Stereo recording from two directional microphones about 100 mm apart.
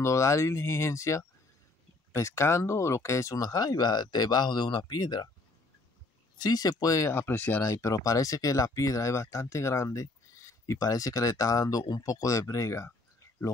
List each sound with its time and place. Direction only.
0.0 s speech: 30° left (ahead or behind)
6.3 s speech: 45° left (ahead or behind)
7.1 s speech: 25° left (ahead or behind)
7.6 s speech: 35° left (ahead or behind)